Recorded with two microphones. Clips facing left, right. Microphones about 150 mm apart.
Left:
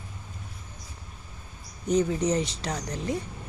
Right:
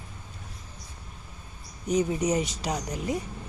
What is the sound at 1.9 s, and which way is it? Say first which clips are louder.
Speech: left 1 dB; 15° right (ahead or behind).